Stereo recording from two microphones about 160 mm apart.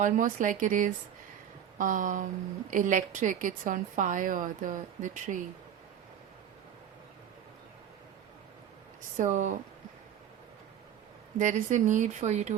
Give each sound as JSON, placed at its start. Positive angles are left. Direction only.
{"t": 0.0, "sound": "a woman's voice", "side_deg": -55}
{"t": 9.1, "sound": "a woman's voice", "side_deg": -50}
{"t": 11.3, "sound": "a woman's voice", "side_deg": -50}